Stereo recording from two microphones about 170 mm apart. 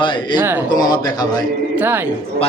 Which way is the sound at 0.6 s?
25° left (ahead or behind).